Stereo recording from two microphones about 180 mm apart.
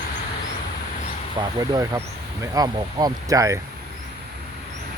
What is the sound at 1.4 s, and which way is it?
Speech, 20° right (ahead or behind).